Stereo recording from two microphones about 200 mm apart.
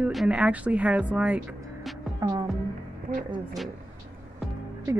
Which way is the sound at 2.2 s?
20° right (ahead or behind).